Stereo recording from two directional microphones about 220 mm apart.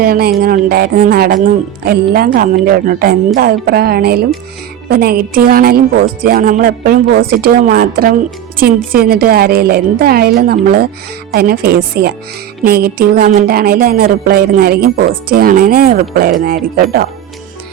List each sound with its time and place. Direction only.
0.0 s speech: 45° right (ahead or behind)